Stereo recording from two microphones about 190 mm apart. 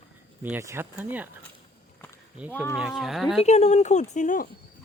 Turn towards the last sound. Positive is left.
turn(degrees=40)  # may be behind; listen again after turning